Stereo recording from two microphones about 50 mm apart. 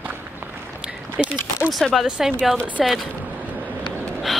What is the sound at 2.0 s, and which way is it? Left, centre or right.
Speech, centre.